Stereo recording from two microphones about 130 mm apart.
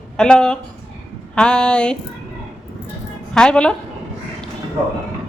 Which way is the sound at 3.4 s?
5° left (ahead or behind).